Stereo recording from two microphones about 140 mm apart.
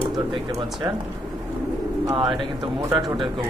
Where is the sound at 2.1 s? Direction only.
35° right (ahead or behind).